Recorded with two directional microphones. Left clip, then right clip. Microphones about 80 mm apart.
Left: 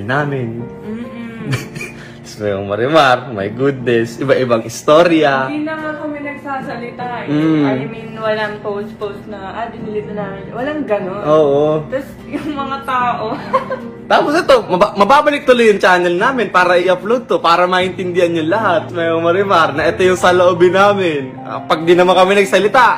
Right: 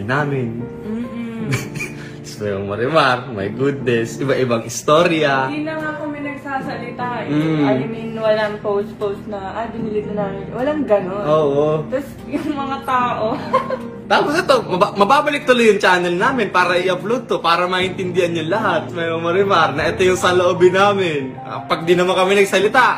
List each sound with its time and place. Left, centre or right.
2.4 s a man's voice: left
7.3 s speech: left
7.7 s speech: right
10.1 s speech: right
11.5 s speech: left
12.4 s speech: right
14.0 s a man's voice: left
21.6 s speech: left